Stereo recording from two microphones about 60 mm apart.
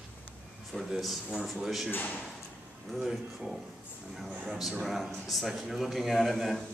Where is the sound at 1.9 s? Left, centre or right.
Left.